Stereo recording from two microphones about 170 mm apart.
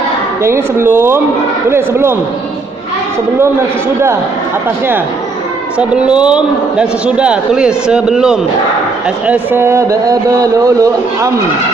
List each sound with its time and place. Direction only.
0.4 s speech: 15° right (ahead or behind)
5.7 s speech: 5° right (ahead or behind)